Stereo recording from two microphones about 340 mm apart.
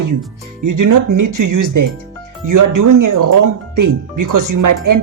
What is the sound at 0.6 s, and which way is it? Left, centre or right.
Speech, right.